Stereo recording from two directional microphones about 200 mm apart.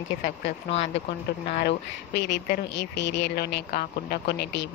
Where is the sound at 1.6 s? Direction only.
55° left (ahead or behind).